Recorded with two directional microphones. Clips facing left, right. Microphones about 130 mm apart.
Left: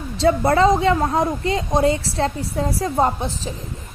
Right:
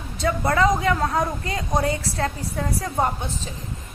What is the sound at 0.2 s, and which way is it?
A woman's voice, 30° left (ahead or behind).